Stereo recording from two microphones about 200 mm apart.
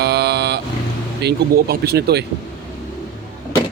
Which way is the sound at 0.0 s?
55° right (ahead or behind).